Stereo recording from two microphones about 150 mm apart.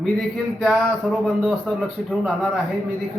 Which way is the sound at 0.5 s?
Centre (ahead or behind).